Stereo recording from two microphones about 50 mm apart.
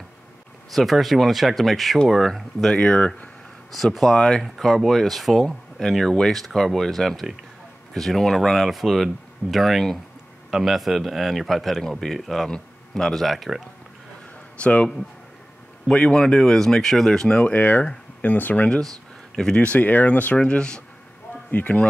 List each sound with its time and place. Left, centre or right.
0.7 s speech: centre
2.7 s speech: centre
3.7 s speech: centre
14.6 s speech: left
15.9 s speech: centre
17.6 s speech: left
19.3 s speech: centre
19.6 s speech: left
20.3 s speech: centre
21.5 s speech: left